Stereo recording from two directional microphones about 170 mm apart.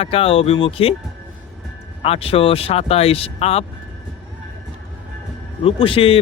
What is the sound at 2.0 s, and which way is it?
Speech, 35° left (ahead or behind).